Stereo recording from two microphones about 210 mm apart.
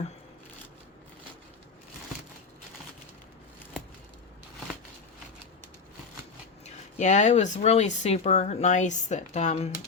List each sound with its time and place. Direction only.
6.7 s speech: 35° left (ahead or behind)